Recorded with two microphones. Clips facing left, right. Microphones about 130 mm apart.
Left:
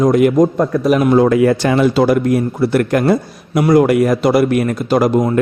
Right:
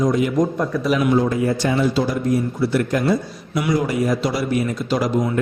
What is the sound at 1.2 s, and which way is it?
A man's voice, 75° left (ahead or behind).